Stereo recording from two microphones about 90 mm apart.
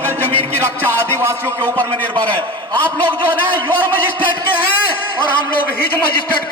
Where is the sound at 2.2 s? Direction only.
15° left (ahead or behind).